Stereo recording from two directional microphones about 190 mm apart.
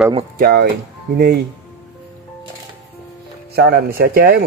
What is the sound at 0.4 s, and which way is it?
Speech, 55° right (ahead or behind).